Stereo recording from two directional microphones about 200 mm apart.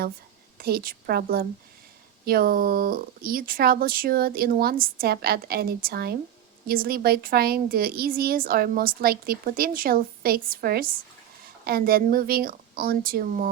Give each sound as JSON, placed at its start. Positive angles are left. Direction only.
{"t": 0.6, "sound": "a woman's voice", "side_deg": -45}